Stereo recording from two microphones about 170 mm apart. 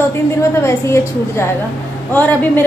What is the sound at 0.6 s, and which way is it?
A woman's voice, 15° left (ahead or behind).